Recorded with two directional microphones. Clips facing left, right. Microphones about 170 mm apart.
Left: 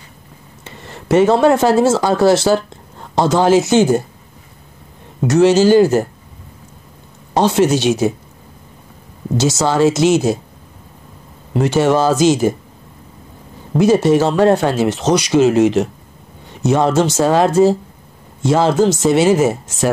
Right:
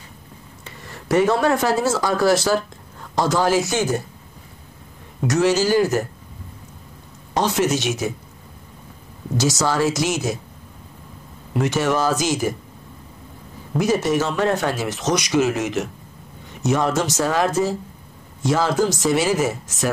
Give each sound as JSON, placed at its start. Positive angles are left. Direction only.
{"t": 0.7, "sound": "speech", "side_deg": 25}
{"t": 5.2, "sound": "speech", "side_deg": 30}
{"t": 7.3, "sound": "speech", "side_deg": 30}
{"t": 9.4, "sound": "speech", "side_deg": 25}
{"t": 11.5, "sound": "speech", "side_deg": 30}
{"t": 13.7, "sound": "speech", "side_deg": 30}